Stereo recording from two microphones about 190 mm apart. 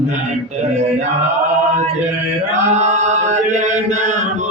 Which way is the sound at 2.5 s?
35° right (ahead or behind).